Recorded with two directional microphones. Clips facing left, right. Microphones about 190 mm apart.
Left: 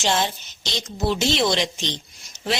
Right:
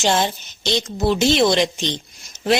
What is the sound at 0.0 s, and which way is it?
Speech, 50° right (ahead or behind).